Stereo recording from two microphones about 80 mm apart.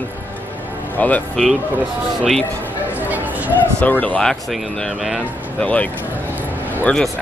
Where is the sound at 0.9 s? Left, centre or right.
Centre.